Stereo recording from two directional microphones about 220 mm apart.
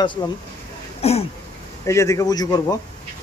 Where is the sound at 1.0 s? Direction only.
30° left (ahead or behind).